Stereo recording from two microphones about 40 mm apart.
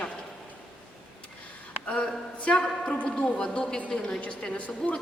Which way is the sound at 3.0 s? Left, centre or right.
Left.